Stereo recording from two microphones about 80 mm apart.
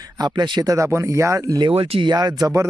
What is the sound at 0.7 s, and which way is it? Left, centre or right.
Speech, right.